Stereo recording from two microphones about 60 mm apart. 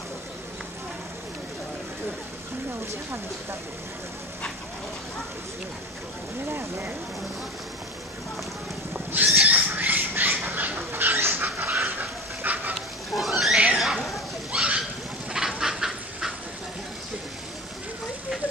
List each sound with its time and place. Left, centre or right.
6.5 s speech: right
9.1 s squawk: right
12.0 s dog: right
12.7 s a sound: centre
14.5 s a sound: centre
15.3 s fowl: centre